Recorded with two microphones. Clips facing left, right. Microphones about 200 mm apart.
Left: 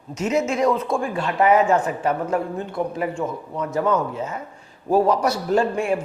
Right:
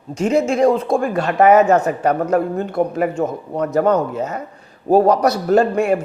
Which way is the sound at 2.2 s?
65° right (ahead or behind).